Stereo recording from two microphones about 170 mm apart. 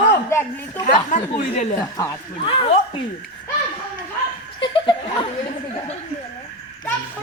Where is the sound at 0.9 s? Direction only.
45° left (ahead or behind).